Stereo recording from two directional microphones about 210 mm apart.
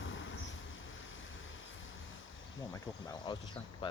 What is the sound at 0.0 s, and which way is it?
Vehicle, 65° left (ahead or behind).